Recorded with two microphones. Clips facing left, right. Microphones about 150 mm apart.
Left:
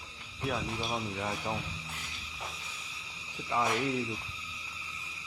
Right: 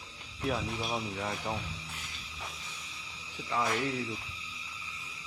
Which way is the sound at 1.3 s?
10° left (ahead or behind).